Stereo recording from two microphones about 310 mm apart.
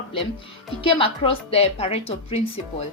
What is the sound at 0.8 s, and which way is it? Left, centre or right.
A woman's voice, centre.